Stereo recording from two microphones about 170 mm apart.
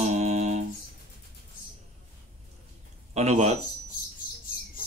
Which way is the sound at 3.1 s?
40° right (ahead or behind).